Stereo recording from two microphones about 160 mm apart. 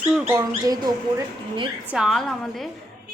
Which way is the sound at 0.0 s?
15° right (ahead or behind).